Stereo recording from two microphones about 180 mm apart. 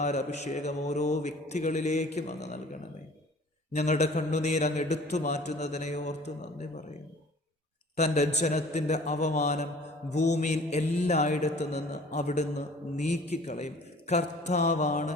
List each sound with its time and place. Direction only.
0.0 s a man's voice: 40° left (ahead or behind)
3.7 s a man's voice: 40° left (ahead or behind)
7.9 s a man's voice: 40° left (ahead or behind)